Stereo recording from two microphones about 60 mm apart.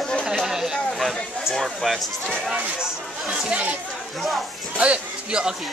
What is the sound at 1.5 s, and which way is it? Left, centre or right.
Speech, centre.